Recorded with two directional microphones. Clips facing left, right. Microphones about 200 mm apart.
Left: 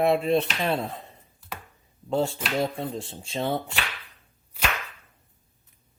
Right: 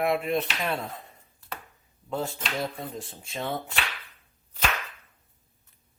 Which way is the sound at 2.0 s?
30° left (ahead or behind).